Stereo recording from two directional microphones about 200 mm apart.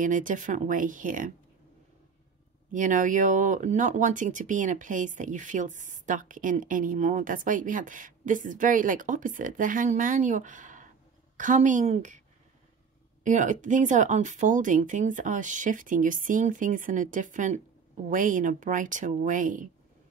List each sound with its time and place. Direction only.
0.0 s speech: 40° right (ahead or behind)
2.7 s speech: 40° right (ahead or behind)
13.2 s speech: 40° right (ahead or behind)